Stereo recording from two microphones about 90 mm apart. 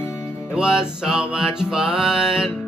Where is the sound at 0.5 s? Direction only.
5° right (ahead or behind).